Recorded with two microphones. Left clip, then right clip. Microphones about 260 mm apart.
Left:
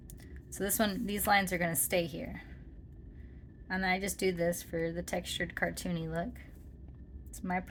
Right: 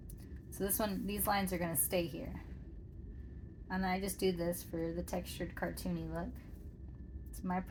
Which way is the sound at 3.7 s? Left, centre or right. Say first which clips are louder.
Left 5 dB; left.